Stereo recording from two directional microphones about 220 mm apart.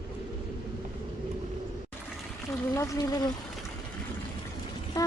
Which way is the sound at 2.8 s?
15° left (ahead or behind).